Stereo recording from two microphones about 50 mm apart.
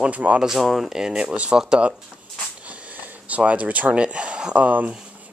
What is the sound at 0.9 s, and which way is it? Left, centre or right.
Speech, centre.